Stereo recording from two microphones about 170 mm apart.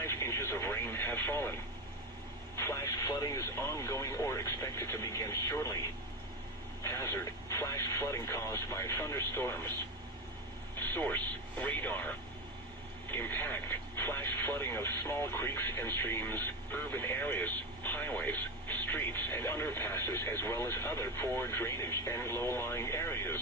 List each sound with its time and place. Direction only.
0.0 s radio: 15° left (ahead or behind)
2.6 s speech: 15° left (ahead or behind)
6.8 s speech: 15° left (ahead or behind)
10.8 s speech: 10° left (ahead or behind)